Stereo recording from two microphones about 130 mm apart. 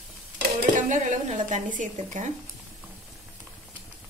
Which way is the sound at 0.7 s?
75° right (ahead or behind).